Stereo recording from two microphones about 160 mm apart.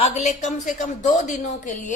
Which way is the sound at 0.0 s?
45° left (ahead or behind).